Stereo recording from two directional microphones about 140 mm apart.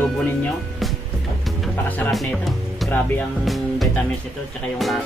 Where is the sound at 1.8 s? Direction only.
15° left (ahead or behind).